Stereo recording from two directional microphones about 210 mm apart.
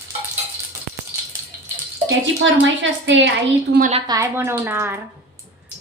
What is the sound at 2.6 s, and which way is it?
Speech, 60° right (ahead or behind).